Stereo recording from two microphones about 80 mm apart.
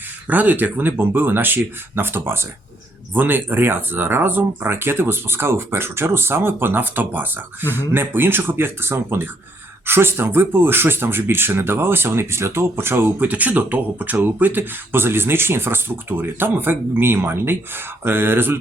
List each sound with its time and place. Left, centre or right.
0.3 s speech: right